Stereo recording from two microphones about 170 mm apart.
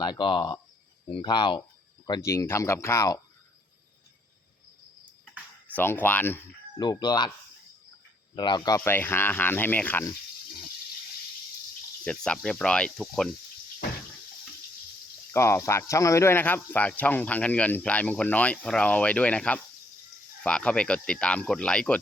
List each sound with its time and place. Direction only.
0.0 s speech: 25° left (ahead or behind)
5.7 s speech: 10° left (ahead or behind)
6.7 s speech: 25° left (ahead or behind)
8.4 s speech: 25° left (ahead or behind)
12.0 s speech: 5° left (ahead or behind)
15.3 s speech: 15° left (ahead or behind)